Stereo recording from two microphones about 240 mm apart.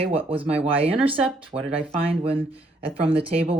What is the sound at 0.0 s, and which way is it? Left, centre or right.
Speech, right.